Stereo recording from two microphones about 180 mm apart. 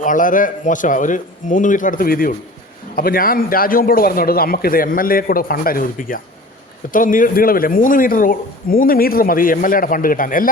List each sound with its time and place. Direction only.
0.0 s a man's voice: 45° left (ahead or behind)